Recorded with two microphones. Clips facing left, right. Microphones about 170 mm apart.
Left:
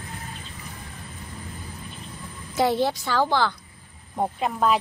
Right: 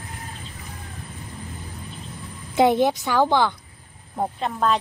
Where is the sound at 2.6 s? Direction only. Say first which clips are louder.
Right 4 dB; 20° right (ahead or behind).